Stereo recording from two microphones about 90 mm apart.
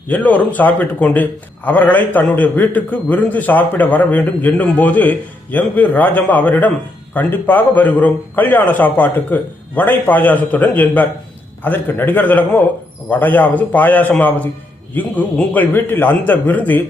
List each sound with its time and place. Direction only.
0.1 s a man's voice: 20° left (ahead or behind)